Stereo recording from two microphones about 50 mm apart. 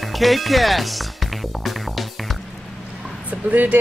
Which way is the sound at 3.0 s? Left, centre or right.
Right.